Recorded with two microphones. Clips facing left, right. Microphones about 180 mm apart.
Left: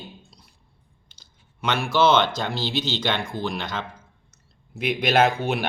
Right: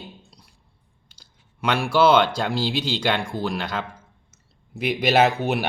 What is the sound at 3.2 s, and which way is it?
Speech, 35° right (ahead or behind).